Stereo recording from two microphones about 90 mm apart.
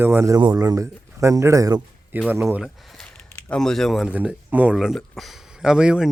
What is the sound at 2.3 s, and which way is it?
Speech, 20° right (ahead or behind).